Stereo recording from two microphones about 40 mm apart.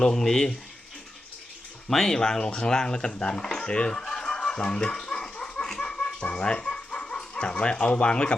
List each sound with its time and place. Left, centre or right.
0.0 s speech: centre
1.9 s speech: centre
3.7 s a sound: left